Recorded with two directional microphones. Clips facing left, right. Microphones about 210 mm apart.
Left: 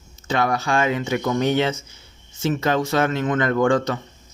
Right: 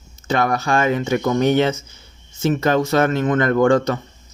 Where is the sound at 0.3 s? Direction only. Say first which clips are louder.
Right 2 dB; 45° right (ahead or behind).